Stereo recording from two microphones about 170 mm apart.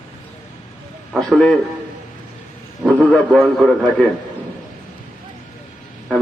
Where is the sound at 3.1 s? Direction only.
5° left (ahead or behind).